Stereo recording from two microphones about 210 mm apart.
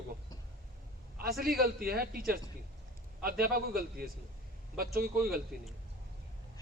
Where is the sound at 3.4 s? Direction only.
45° right (ahead or behind).